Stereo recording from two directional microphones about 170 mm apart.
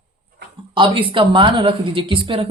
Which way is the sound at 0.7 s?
30° right (ahead or behind).